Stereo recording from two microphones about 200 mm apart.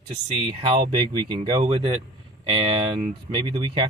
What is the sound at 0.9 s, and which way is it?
Speech, 25° right (ahead or behind).